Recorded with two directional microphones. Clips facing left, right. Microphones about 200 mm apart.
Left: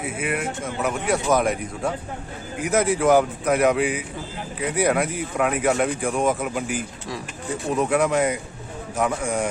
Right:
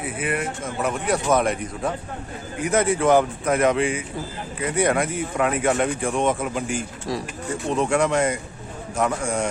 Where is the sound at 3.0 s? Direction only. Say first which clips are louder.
Even; 5° left (ahead or behind).